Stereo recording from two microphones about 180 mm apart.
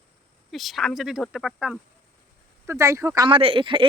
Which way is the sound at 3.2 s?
30° right (ahead or behind).